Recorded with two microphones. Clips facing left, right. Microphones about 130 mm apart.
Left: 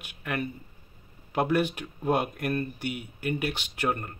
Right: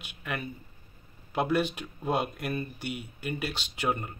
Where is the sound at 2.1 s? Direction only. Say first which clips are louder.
Left 3 dB; 50° left (ahead or behind).